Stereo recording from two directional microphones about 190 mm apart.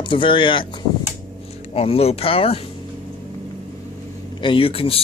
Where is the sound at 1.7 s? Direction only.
30° left (ahead or behind).